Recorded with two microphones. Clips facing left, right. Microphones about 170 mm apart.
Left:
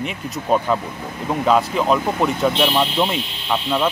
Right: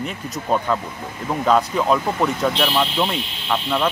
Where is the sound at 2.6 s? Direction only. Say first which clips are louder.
Left 2 dB; 15° left (ahead or behind).